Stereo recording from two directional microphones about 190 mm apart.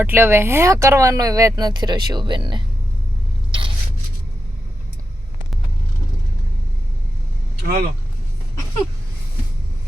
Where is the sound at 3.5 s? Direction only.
25° right (ahead or behind).